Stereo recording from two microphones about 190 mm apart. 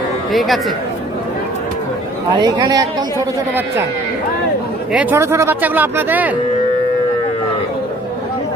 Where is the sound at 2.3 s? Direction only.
25° right (ahead or behind).